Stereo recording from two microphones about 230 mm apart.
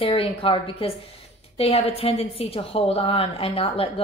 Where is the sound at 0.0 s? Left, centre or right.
Left.